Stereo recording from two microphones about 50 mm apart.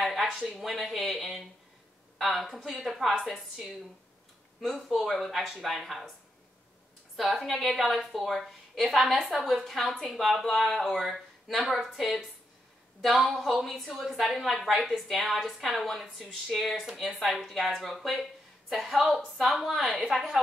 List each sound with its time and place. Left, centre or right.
0.0 s a sound: centre
0.3 s speech: right
0.6 s a woman's voice: centre
4.6 s a woman's voice: centre
7.2 s a woman's voice: centre